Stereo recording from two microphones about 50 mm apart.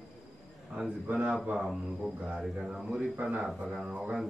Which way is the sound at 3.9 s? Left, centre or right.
Right.